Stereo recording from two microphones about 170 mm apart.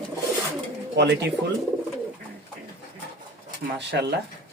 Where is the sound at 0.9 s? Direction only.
80° right.